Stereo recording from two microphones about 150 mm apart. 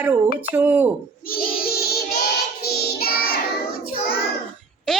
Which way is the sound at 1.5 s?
90° left.